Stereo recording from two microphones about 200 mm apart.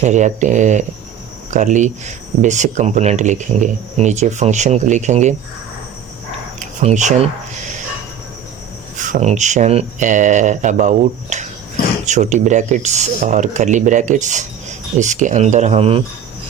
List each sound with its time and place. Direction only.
0.0 s speech: 35° right (ahead or behind)
6.6 s speech: 35° right (ahead or behind)
9.0 s speech: 40° right (ahead or behind)